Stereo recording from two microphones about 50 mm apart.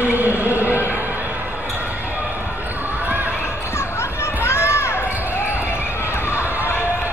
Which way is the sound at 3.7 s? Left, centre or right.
Left.